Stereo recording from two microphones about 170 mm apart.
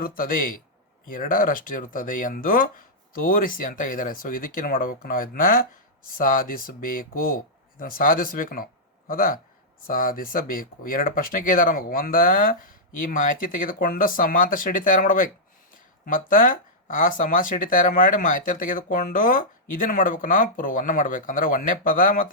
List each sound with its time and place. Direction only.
0.0 s speech: 55° left (ahead or behind)